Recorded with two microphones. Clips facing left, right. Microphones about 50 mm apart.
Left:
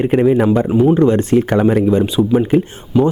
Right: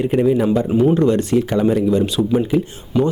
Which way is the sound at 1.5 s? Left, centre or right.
Left.